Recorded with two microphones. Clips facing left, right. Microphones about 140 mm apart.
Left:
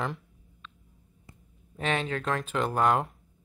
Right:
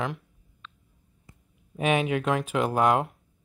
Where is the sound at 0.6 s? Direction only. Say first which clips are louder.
Right 1 dB; 90° right.